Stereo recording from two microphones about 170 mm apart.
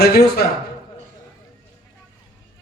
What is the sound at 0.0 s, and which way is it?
Speech, 65° left (ahead or behind).